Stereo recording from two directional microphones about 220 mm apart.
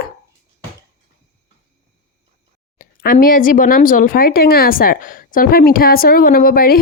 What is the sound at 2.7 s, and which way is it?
Speech, 40° left (ahead or behind).